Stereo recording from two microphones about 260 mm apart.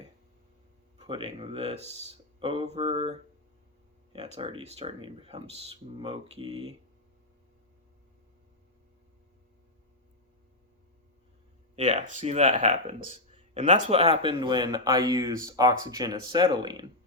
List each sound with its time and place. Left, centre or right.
0.9 s speech: centre
11.8 s speech: right